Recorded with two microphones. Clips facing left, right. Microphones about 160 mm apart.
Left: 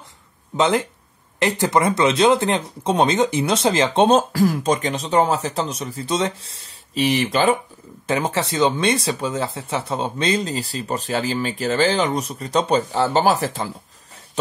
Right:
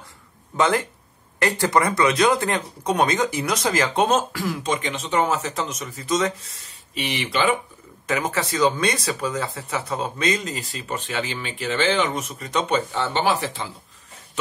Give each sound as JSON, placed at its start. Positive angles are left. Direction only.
{"t": 0.6, "sound": "speech", "side_deg": 20}
{"t": 8.1, "sound": "speech", "side_deg": 30}